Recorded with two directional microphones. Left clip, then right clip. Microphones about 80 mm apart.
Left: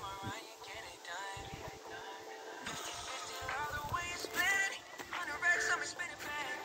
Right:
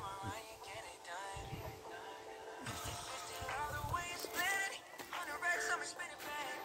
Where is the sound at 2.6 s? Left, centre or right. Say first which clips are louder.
Left 3 dB; right.